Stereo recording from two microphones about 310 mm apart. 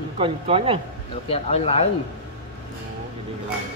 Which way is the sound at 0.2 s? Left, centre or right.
Centre.